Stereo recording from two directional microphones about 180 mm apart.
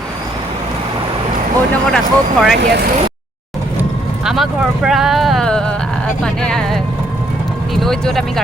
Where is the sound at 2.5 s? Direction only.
65° right (ahead or behind).